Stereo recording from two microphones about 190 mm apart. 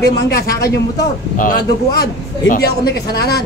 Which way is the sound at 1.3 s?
45° left (ahead or behind).